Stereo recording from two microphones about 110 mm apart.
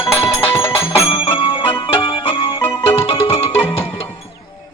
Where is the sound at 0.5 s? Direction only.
25° left (ahead or behind).